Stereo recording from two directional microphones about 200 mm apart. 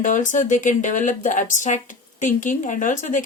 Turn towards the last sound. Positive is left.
turn(degrees=40)  # may be behind; listen again after turning